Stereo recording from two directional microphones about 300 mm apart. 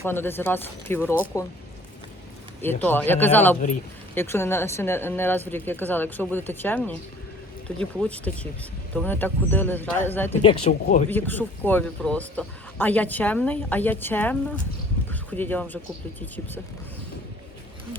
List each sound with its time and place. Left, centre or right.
0.0 s speech: centre
2.6 s a man's voice: centre
10.5 s speech: centre
11.1 s a man's voice: centre